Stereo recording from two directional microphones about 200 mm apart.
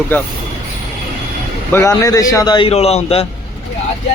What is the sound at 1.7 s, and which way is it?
A man's voice, 10° left (ahead or behind).